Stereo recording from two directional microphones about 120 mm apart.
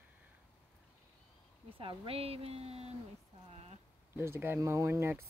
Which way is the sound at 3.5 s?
60° right (ahead or behind).